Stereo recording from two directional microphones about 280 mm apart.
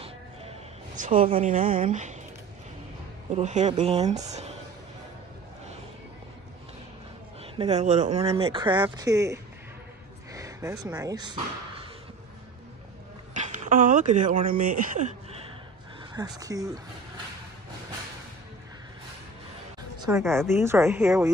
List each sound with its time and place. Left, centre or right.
0.9 s speech: right
3.3 s speech: right
4.3 s a sound: right
7.5 s speech: right
13.3 s speech: right
16.2 s speech: centre
20.0 s speech: centre